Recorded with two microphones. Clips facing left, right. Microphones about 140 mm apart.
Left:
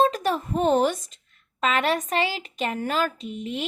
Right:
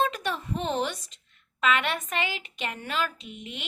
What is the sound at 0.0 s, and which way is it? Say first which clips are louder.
Speech: left 6 dB; 40° left (ahead or behind).